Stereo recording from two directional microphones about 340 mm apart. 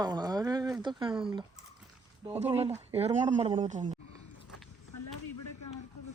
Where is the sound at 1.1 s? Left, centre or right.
Centre.